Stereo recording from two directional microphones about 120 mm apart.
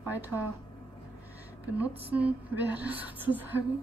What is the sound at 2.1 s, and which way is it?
A woman's voice, 10° right (ahead or behind).